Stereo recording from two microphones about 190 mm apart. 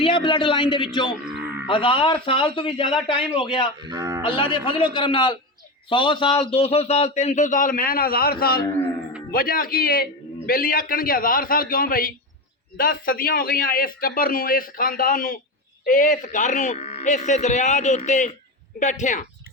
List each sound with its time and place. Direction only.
0.0 s a man's voice: 25° left (ahead or behind)
3.8 s speech: 20° right (ahead or behind)
4.2 s a man's voice: 25° left (ahead or behind)